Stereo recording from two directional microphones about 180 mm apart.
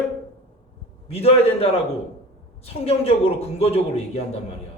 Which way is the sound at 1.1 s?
35° left (ahead or behind).